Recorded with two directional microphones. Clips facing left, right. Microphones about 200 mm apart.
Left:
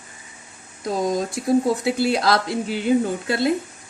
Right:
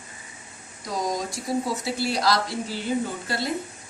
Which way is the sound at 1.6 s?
55° left (ahead or behind).